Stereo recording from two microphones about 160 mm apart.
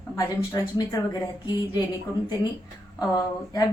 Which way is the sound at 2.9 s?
20° left (ahead or behind).